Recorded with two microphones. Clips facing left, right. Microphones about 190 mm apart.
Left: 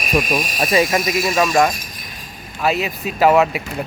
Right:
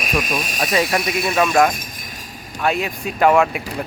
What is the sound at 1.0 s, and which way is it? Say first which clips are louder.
Speech: left 2 dB; 60° right (ahead or behind).